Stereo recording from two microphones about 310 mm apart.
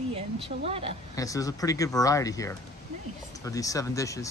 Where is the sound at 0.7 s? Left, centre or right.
Centre.